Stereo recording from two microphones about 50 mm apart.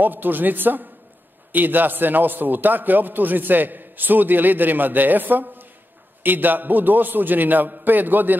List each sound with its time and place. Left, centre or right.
0.0 s a man's voice: right